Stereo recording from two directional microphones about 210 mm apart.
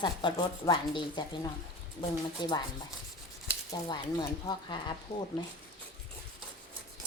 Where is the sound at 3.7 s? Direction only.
20° left (ahead or behind).